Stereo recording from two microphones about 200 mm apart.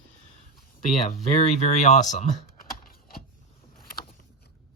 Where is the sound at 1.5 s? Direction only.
35° left (ahead or behind).